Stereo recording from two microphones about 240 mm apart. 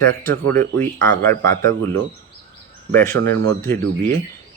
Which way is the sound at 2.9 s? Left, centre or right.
Centre.